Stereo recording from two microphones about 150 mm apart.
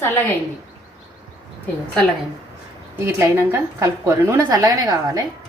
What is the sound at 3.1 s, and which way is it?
A woman's voice, 20° right (ahead or behind).